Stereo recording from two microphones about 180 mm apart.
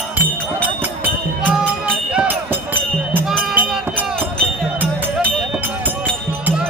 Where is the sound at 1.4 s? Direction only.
5° right (ahead or behind).